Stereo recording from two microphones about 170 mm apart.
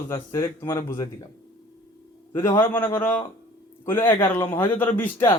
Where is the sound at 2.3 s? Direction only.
15° left (ahead or behind).